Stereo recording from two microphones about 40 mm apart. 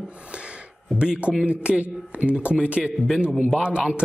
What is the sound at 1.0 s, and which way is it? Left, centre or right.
Speech, right.